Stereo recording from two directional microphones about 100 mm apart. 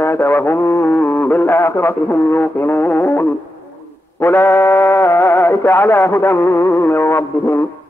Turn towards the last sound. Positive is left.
turn(degrees=20)  # may be behind; listen again after turning